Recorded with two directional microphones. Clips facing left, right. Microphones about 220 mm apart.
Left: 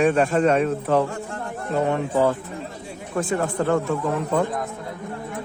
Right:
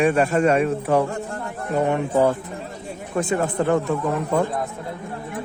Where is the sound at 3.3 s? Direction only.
15° right (ahead or behind).